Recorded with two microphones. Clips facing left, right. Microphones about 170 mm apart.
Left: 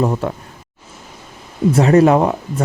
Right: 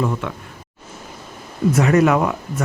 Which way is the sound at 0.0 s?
35° left (ahead or behind).